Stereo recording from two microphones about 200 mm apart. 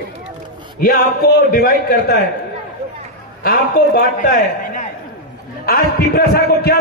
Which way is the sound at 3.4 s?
45° left (ahead or behind).